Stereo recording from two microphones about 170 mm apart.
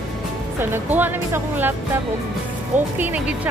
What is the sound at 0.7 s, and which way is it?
Speech, 10° right (ahead or behind).